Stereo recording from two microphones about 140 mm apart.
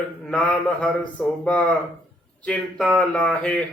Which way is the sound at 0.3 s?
5° left (ahead or behind).